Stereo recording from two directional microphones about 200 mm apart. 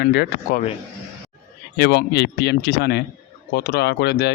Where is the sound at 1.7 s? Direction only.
55° left (ahead or behind).